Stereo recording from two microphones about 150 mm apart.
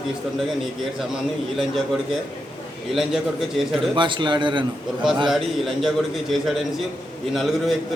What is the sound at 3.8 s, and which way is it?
Speech, 35° right (ahead or behind).